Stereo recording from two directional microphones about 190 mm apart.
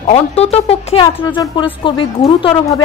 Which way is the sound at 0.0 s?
35° left (ahead or behind).